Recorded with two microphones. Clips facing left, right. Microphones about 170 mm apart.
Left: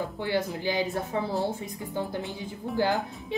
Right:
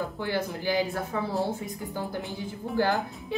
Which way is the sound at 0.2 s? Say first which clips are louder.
Left 3 dB; 20° left (ahead or behind).